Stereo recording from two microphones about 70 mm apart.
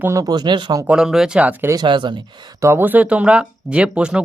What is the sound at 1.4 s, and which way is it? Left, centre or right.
Speech, right.